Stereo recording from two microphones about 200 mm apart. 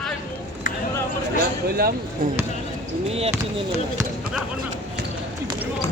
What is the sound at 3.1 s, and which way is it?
Speech, 30° right (ahead or behind).